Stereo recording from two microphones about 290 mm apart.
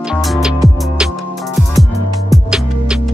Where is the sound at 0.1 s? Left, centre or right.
Centre.